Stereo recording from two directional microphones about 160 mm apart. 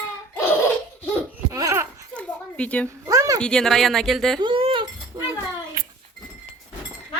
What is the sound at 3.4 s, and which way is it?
Speech, 5° left (ahead or behind).